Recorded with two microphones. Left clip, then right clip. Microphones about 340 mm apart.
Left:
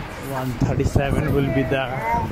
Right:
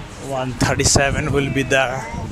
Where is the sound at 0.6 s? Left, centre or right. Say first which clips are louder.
Right 8 dB; right.